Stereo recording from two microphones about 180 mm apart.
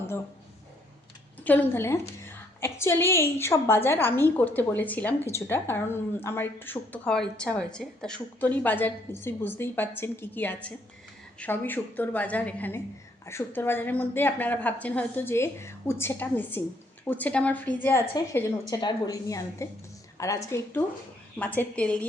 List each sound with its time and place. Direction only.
1.5 s a woman's voice: 10° left (ahead or behind)
18.3 s a woman's voice: 20° left (ahead or behind)